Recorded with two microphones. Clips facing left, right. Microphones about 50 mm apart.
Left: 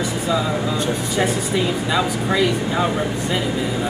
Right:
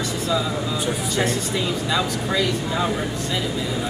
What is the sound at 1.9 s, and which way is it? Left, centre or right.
Speech, centre.